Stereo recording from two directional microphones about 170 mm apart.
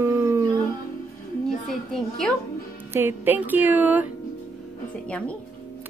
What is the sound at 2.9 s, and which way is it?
Speech, 10° right (ahead or behind).